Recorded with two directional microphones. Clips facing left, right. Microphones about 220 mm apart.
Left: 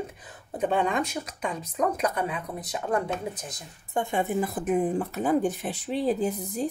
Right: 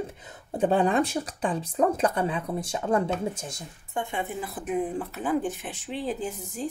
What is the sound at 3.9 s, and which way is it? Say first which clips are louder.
Speech: left 5 dB; 45° left (ahead or behind).